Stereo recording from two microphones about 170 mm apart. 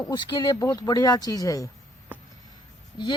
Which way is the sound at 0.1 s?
25° left (ahead or behind).